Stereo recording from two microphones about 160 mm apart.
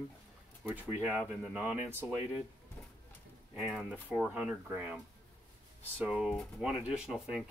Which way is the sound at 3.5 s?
Centre (ahead or behind).